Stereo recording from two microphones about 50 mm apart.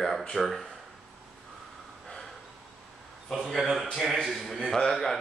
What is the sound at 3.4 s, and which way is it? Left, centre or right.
Speech, centre.